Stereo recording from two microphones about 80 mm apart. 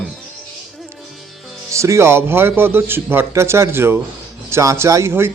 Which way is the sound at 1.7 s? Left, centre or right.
Right.